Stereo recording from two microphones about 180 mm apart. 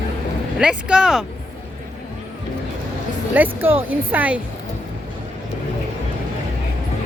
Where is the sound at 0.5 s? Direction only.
5° right (ahead or behind).